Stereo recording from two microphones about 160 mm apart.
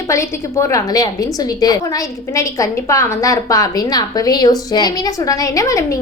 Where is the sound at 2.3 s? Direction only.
20° left (ahead or behind).